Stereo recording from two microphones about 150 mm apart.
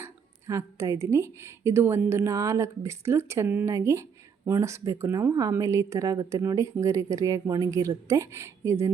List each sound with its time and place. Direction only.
0.0 s speech: 20° right (ahead or behind)